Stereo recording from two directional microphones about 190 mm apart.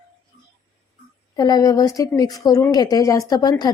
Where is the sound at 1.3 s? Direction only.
20° left (ahead or behind).